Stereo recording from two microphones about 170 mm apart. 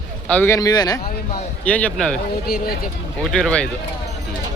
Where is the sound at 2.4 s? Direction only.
60° left (ahead or behind).